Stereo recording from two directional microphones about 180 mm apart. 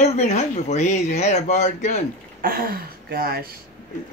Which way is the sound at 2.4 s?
55° right (ahead or behind).